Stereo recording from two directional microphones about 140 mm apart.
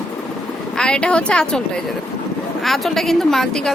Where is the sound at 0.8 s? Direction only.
5° left (ahead or behind).